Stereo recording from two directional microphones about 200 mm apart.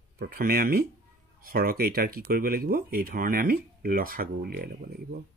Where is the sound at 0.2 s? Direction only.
50° right (ahead or behind).